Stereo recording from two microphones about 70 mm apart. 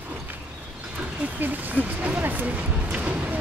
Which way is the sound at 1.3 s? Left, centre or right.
Right.